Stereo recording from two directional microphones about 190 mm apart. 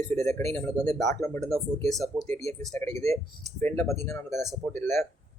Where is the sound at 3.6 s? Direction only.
10° left (ahead or behind).